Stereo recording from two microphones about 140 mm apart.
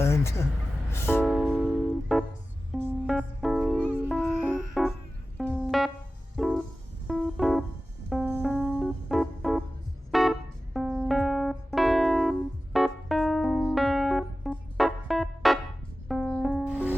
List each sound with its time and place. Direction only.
0.0 s a sound: 20° left (ahead or behind)
0.9 s music: 15° left (ahead or behind)
1.2 s music: 5° right (ahead or behind)
8.3 s organ: 5° left (ahead or behind)
10.8 s keyboard: 5° left (ahead or behind)
14.8 s organ: centre (ahead or behind)
16.0 s music: 5° left (ahead or behind)